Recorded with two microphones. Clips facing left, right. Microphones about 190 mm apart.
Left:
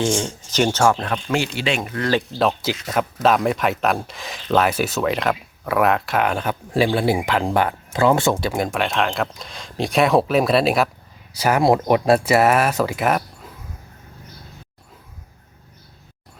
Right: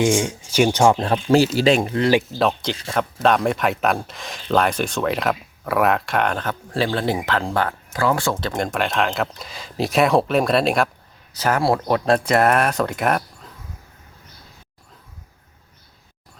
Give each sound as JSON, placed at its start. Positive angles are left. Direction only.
{"t": 0.0, "sound": "speech", "side_deg": -10}
{"t": 2.3, "sound": "speech", "side_deg": 0}
{"t": 8.4, "sound": "speech", "side_deg": 10}